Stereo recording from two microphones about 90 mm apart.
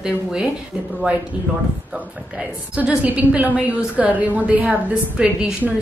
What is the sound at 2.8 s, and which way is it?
A woman's voice, 15° right (ahead or behind).